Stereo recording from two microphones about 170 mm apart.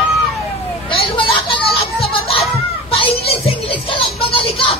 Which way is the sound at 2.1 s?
35° left (ahead or behind).